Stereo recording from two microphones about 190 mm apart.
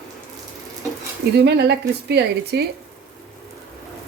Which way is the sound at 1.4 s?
60° right (ahead or behind).